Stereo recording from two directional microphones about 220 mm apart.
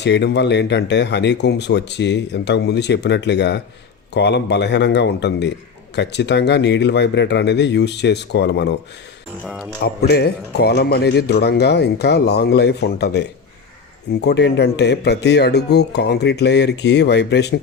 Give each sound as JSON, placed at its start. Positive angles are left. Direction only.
{"t": 0.0, "sound": "speech", "side_deg": 50}
{"t": 9.8, "sound": "speech", "side_deg": 45}